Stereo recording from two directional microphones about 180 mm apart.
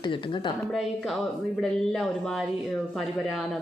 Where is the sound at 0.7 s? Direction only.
Centre (ahead or behind).